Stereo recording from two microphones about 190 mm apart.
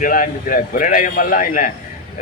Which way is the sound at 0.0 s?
45° left (ahead or behind).